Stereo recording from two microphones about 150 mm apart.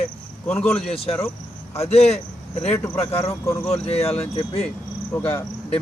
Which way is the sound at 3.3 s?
20° left (ahead or behind).